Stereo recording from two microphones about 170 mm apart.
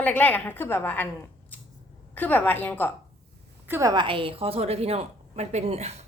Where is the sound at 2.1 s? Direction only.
10° left (ahead or behind).